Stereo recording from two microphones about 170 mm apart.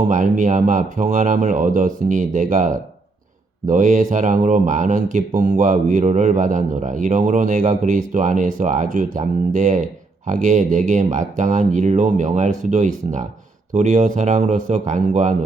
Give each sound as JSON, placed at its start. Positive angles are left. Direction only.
{"t": 0.0, "sound": "speech", "side_deg": -50}